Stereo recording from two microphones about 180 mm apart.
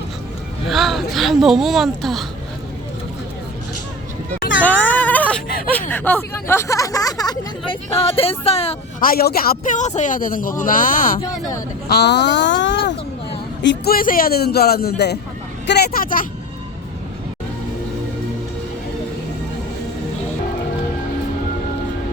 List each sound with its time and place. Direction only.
0.7 s speech: centre (ahead or behind)
4.6 s whimper: 10° left (ahead or behind)
5.9 s speech: 10° left (ahead or behind); by 8.7 s 35° left (ahead or behind)
9.0 s a man's voice: 55° left (ahead or behind)
11.2 s speech: 20° left (ahead or behind)
11.9 s speech: 65° left (ahead or behind); by 13.0 s 85° left
13.6 s speech: 70° left (ahead or behind); by 16.2 s 50° left (ahead or behind)